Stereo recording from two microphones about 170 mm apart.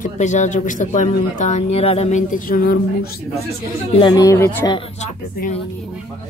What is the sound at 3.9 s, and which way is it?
Speech, 25° left (ahead or behind).